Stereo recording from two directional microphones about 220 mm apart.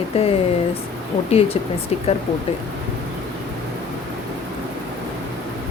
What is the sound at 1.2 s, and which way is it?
Speech, 25° left (ahead or behind).